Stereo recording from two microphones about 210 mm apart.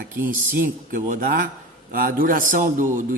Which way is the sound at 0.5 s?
40° right (ahead or behind).